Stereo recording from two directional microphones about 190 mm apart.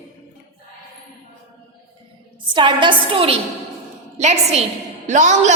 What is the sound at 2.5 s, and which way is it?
A woman's voice, 25° right (ahead or behind).